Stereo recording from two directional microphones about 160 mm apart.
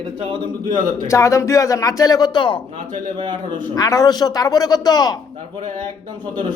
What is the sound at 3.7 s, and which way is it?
Speech, 25° left (ahead or behind).